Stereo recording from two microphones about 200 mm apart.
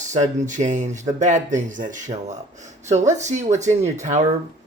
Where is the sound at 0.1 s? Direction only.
40° right (ahead or behind).